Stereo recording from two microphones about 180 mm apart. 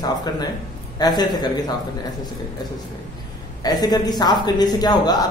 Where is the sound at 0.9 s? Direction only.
20° left (ahead or behind).